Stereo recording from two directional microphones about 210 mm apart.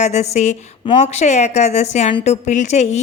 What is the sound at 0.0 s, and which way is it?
Speech, 30° left (ahead or behind).